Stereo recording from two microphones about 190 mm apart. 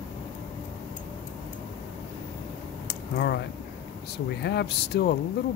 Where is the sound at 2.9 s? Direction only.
60° left (ahead or behind).